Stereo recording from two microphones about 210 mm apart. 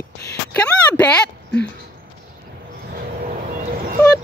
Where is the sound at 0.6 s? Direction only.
5° left (ahead or behind).